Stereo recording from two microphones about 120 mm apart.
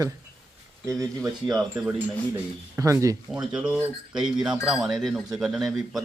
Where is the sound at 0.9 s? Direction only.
30° right (ahead or behind).